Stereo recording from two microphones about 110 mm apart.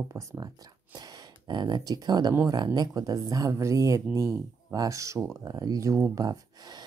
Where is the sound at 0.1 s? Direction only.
30° right (ahead or behind).